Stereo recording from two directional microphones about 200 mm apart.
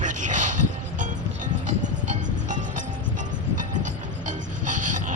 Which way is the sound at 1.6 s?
40° right (ahead or behind).